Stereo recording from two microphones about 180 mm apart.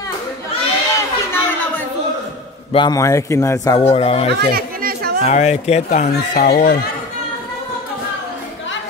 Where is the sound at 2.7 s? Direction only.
25° left (ahead or behind).